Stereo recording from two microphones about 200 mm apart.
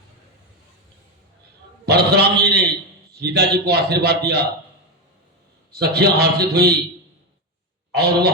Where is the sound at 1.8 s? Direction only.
55° right (ahead or behind).